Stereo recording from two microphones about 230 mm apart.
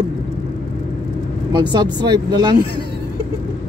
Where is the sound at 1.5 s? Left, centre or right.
Centre.